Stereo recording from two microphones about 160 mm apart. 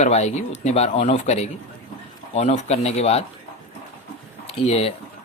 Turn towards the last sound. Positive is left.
turn(degrees=40)  # may be behind; listen again after turning